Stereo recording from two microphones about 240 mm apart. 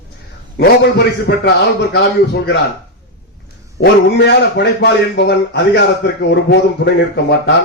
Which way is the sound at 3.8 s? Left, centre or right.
Left.